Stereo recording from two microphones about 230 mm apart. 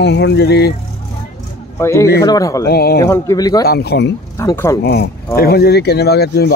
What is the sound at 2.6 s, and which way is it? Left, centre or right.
Speech, left.